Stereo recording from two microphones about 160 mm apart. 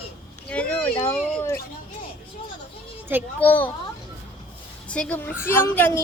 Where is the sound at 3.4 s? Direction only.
10° left (ahead or behind).